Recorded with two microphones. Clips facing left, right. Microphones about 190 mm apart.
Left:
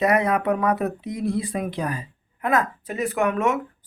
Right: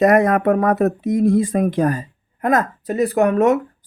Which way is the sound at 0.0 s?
45° right (ahead or behind).